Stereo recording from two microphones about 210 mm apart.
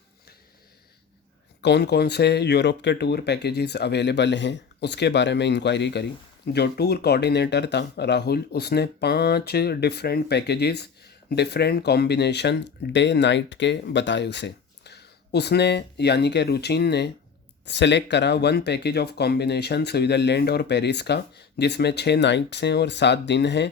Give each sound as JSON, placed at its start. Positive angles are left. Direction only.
{"t": 1.6, "sound": "speech", "side_deg": 50}